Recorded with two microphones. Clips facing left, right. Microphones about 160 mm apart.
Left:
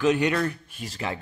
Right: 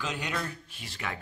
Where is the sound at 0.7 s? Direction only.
45° left (ahead or behind).